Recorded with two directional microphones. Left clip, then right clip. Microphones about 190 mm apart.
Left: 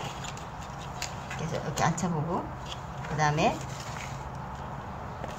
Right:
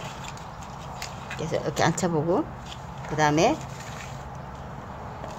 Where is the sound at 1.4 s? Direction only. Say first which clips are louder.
Right 5 dB; 45° right (ahead or behind).